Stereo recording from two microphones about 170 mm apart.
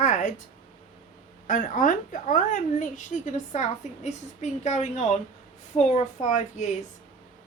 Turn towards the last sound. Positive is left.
turn(degrees=45)  # may be behind; listen again after turning